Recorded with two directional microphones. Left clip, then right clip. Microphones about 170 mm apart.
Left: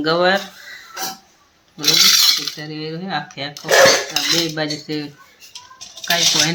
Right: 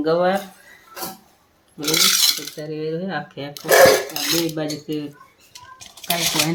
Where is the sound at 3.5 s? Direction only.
90° right.